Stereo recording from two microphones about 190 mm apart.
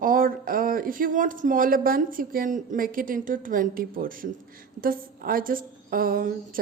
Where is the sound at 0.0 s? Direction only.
45° right (ahead or behind).